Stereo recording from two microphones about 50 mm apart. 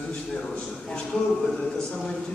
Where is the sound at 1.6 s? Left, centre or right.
Centre.